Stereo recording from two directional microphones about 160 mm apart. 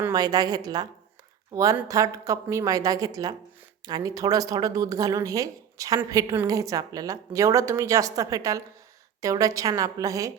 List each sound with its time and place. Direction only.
0.1 s speech: 25° right (ahead or behind)